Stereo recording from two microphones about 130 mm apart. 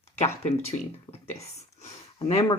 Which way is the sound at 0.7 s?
55° left (ahead or behind).